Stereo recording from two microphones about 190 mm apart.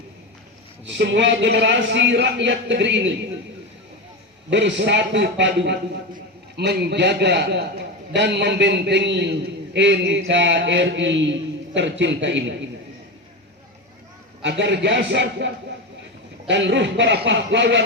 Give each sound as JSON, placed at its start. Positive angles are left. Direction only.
{"t": 0.9, "sound": "a man's voice", "side_deg": -65}
{"t": 4.4, "sound": "a man's voice", "side_deg": -70}
{"t": 14.4, "sound": "a man's voice", "side_deg": -65}